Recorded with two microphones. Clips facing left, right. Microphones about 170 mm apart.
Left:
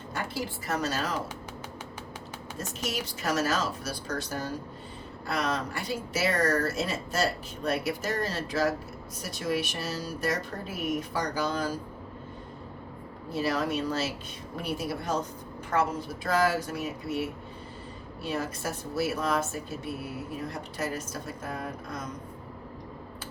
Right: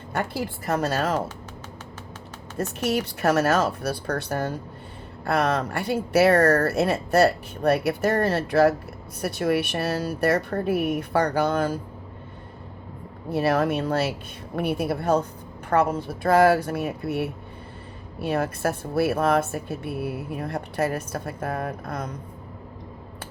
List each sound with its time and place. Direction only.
0.1 s speech: 55° right (ahead or behind)
2.6 s speech: 60° right (ahead or behind)
13.3 s speech: 60° right (ahead or behind)